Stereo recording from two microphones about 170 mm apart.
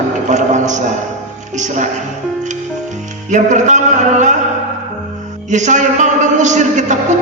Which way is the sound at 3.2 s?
45° right (ahead or behind).